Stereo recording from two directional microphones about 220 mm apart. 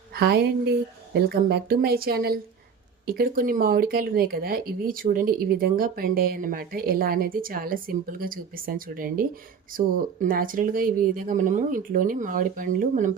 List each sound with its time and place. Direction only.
0.1 s speech: 45° right (ahead or behind)